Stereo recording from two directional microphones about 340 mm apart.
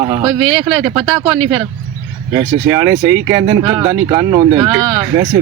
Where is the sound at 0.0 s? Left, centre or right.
Centre.